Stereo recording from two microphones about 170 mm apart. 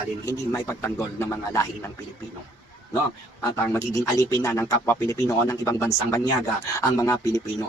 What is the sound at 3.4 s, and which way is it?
A man's voice, 20° left (ahead or behind).